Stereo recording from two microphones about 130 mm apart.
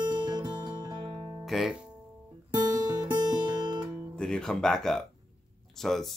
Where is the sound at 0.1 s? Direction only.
30° right (ahead or behind).